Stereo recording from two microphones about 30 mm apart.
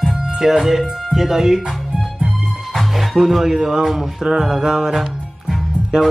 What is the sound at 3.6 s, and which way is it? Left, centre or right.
Speech, centre.